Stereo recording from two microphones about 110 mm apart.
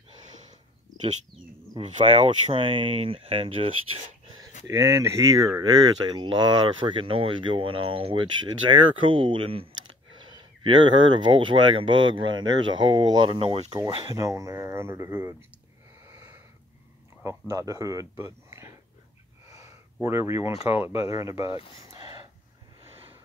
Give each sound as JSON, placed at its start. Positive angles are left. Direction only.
{"t": 2.0, "sound": "speech", "side_deg": -55}
{"t": 4.6, "sound": "speech", "side_deg": -30}
{"t": 10.6, "sound": "speech", "side_deg": -45}
{"t": 13.8, "sound": "speech", "side_deg": -30}
{"t": 17.2, "sound": "speech", "side_deg": -25}
{"t": 18.1, "sound": "a sound", "side_deg": -25}
{"t": 20.6, "sound": "speech", "side_deg": -25}
{"t": 21.7, "sound": "a sound", "side_deg": -40}